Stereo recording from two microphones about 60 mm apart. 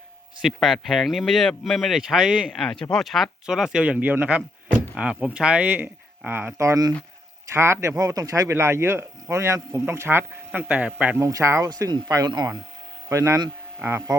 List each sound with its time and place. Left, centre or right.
0.4 s speech: centre
2.5 s speech: centre
3.4 s speech: centre
4.1 s speech: right
4.9 s speech: centre
5.6 s speech: right
6.6 s speech: right
7.5 s speech: right
8.5 s speech: right
11.3 s speech: right
11.6 s speech: right
13.1 s speech: right
14.1 s speech: right